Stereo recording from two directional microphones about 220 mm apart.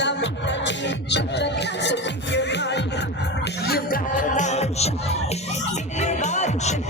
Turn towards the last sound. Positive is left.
turn(degrees=30)  # may be behind; listen again after turning